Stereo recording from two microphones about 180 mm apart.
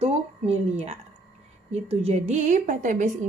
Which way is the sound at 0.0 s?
35° right (ahead or behind).